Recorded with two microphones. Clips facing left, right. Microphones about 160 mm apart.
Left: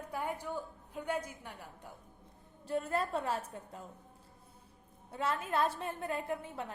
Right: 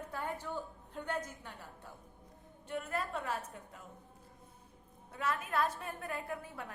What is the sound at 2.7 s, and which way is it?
A woman's voice, 30° left (ahead or behind).